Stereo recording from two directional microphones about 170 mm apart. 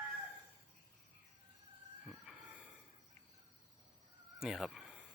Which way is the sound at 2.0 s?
Centre (ahead or behind).